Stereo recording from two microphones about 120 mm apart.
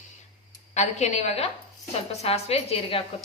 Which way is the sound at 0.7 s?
70° left (ahead or behind).